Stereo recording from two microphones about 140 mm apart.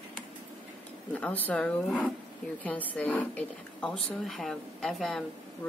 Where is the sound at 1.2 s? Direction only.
10° left (ahead or behind).